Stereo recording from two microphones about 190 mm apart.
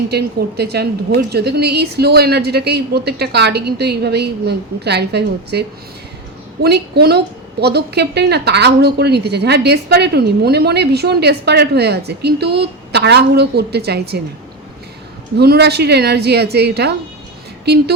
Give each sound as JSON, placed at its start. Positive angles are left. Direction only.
{"t": 0.1, "sound": "a woman's voice", "side_deg": -60}
{"t": 15.4, "sound": "a woman's voice", "side_deg": -60}